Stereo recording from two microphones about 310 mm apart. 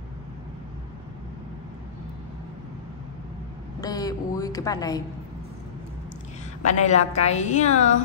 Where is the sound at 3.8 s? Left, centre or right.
Centre.